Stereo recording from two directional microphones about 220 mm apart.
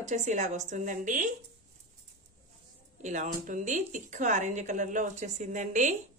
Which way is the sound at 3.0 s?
35° right (ahead or behind).